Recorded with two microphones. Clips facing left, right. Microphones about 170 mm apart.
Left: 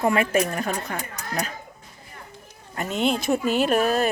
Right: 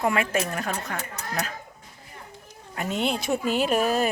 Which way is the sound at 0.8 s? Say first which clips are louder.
Left 1 dB; 15° left (ahead or behind).